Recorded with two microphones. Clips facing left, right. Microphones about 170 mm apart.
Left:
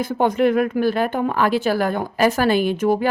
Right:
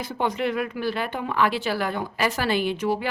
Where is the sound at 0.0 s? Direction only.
50° left (ahead or behind).